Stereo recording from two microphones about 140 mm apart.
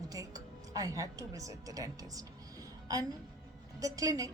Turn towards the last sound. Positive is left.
turn(degrees=-25)  # may be behind; listen again after turning